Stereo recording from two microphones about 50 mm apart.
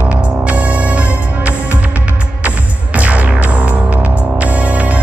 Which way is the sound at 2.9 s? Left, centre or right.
Right.